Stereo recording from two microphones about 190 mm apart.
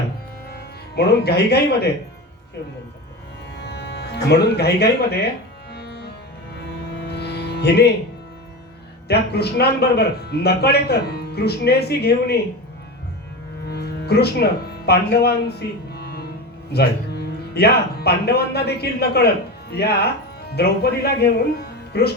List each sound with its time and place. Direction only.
0.5 s speech: 55° left (ahead or behind)
3.6 s speech: 60° left (ahead or behind)
5.7 s music: 60° left (ahead or behind)
9.0 s speech: 60° left (ahead or behind)
13.7 s music: 55° left (ahead or behind)
14.8 s speech: 55° left (ahead or behind)